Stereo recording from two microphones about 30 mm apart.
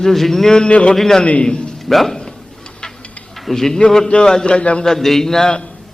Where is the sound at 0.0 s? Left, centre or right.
Centre.